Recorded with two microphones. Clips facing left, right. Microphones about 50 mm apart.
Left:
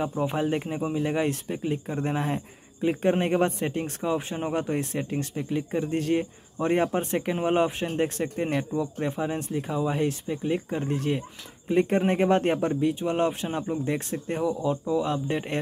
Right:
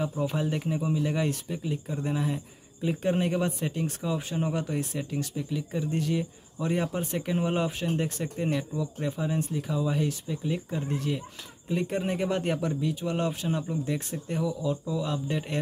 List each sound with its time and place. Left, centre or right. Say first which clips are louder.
0.0 s speech: left 3 dB; left